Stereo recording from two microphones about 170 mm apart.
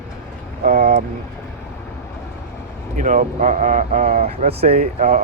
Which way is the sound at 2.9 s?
50° right (ahead or behind).